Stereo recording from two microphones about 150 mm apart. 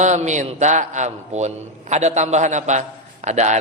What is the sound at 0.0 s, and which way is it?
A man's voice, 50° right (ahead or behind).